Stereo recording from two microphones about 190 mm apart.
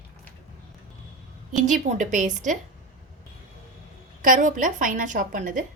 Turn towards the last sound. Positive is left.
turn(degrees=-45)  # may be behind; listen again after turning